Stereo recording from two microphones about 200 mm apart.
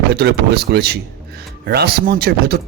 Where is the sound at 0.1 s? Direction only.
55° right (ahead or behind).